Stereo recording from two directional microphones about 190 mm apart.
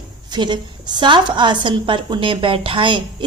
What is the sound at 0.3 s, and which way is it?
Speech, 25° right (ahead or behind).